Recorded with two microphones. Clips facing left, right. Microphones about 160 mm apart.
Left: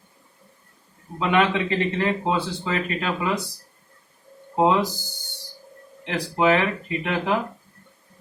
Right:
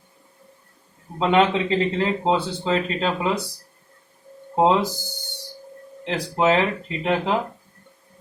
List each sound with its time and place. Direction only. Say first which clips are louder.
1.2 s speech: right 2 dB; 25° right (ahead or behind)
4.5 s speech: right 1 dB; 25° right (ahead or behind)
6.1 s speech: even; 25° right (ahead or behind)